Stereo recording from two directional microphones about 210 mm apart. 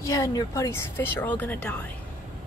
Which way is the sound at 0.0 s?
15° left (ahead or behind).